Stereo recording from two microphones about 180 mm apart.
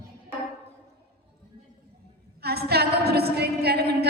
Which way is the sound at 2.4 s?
60° right (ahead or behind).